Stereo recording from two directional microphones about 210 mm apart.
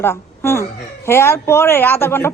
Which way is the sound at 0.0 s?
10° left (ahead or behind).